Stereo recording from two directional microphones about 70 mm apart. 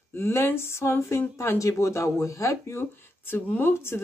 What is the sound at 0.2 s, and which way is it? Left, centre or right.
Speech, left.